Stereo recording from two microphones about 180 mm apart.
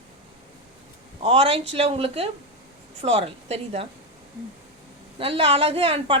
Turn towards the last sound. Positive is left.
turn(degrees=-30)  # may be behind; listen again after turning